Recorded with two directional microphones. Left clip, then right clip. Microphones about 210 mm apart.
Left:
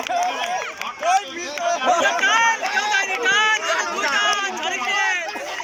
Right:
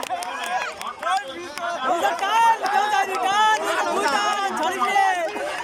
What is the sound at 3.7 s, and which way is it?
Chatter, 15° right (ahead or behind).